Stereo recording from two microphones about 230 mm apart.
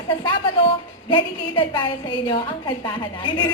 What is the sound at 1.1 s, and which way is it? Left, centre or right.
Speech, left.